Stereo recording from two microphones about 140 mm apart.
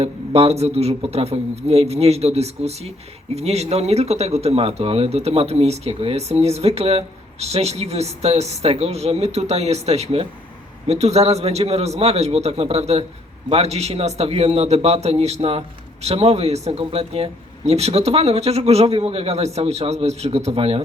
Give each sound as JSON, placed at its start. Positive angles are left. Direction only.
{"t": 0.0, "sound": "speech", "side_deg": -45}